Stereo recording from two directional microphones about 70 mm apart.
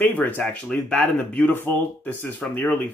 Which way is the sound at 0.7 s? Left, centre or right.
Centre.